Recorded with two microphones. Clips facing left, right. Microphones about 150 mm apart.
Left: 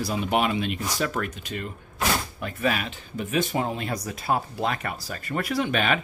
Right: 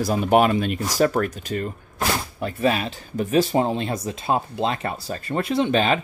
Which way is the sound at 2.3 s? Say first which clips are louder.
Right 5 dB; 30° right (ahead or behind).